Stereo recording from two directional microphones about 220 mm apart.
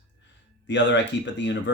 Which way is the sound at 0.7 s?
55° left (ahead or behind).